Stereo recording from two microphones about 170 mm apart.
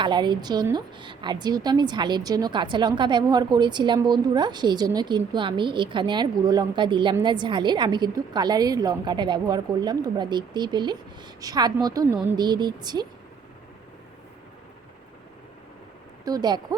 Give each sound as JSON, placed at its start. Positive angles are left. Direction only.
{"t": 0.0, "sound": "a woman's voice", "side_deg": -25}
{"t": 16.2, "sound": "a woman's voice", "side_deg": -25}